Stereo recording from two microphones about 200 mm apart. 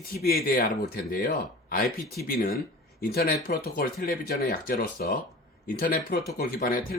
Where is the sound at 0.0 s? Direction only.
50° left (ahead or behind).